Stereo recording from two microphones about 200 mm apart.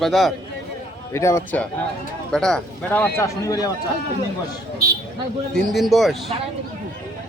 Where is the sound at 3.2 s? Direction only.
15° left (ahead or behind).